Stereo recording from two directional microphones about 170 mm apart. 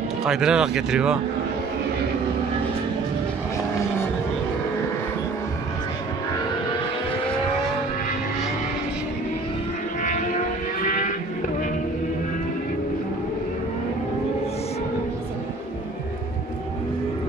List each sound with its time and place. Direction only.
0.2 s speech: 5° right (ahead or behind)
10.0 s vehicle: 45° left (ahead or behind)